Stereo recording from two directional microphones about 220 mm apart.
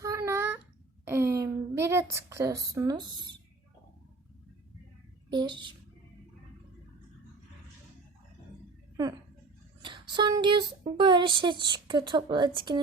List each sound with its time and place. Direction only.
0.0 s a sound: 15° right (ahead or behind)
5.3 s speech: 20° right (ahead or behind)
9.8 s speech: 20° right (ahead or behind)